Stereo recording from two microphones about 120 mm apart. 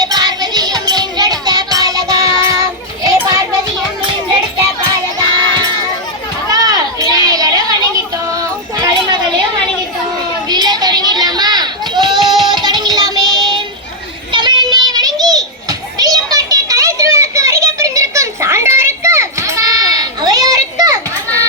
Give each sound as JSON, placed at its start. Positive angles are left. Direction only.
{"t": 0.0, "sound": "music", "side_deg": -35}
{"t": 4.0, "sound": "music", "side_deg": -45}
{"t": 6.5, "sound": "children playing", "side_deg": -35}
{"t": 8.3, "sound": "a sound", "side_deg": -30}
{"t": 10.5, "sound": "a sound", "side_deg": -35}
{"t": 12.2, "sound": "music", "side_deg": -40}
{"t": 14.3, "sound": "child singing", "side_deg": -40}
{"t": 16.0, "sound": "children playing", "side_deg": -30}